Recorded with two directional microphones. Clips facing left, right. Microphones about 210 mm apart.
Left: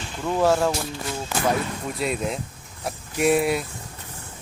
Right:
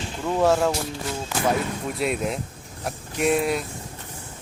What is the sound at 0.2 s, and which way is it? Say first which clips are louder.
Speech: even; centre (ahead or behind).